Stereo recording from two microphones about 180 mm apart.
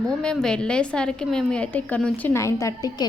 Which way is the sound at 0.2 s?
5° left (ahead or behind).